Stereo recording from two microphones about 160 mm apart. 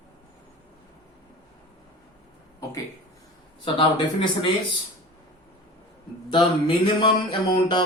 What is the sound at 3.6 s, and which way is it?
Speech, 30° left (ahead or behind).